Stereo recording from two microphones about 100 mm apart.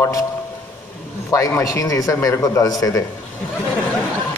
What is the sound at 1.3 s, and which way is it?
A man's voice, 30° left (ahead or behind).